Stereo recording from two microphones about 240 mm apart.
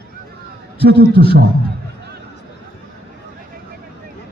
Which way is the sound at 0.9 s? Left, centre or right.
Right.